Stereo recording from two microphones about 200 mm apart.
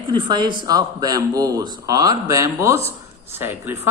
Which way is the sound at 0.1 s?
20° right (ahead or behind).